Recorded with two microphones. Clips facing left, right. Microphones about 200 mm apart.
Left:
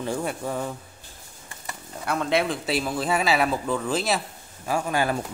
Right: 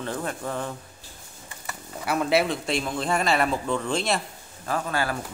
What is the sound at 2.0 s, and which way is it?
A woman's voice, 5° right (ahead or behind).